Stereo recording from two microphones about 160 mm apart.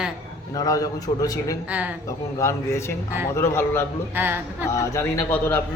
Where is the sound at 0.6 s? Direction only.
20° left (ahead or behind).